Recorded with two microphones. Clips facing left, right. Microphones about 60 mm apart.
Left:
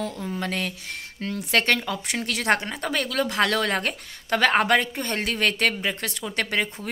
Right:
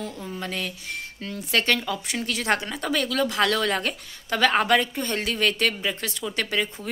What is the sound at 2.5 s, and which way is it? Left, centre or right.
A woman's voice, left.